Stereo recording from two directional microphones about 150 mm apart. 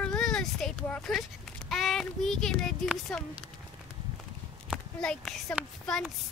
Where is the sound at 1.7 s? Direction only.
Centre (ahead or behind).